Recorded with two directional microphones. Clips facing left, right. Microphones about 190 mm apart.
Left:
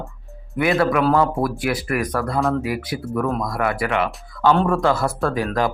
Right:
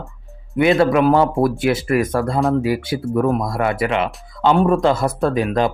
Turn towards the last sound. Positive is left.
turn(degrees=-20)  # may be behind; listen again after turning